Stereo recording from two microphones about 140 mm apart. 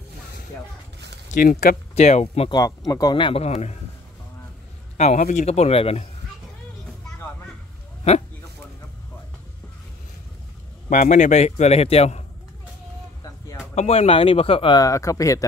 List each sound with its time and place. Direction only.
1.3 s speech: 90° left
2.0 s a man's voice: 50° left (ahead or behind)
2.5 s speech: 25° left (ahead or behind); by 3.7 s 50° left (ahead or behind)
4.9 s a man's voice: 55° left (ahead or behind)
10.9 s a man's voice: 65° left (ahead or behind); by 12.3 s 50° left (ahead or behind)
13.7 s a man's voice: 45° left (ahead or behind)
14.8 s speech: 25° left (ahead or behind)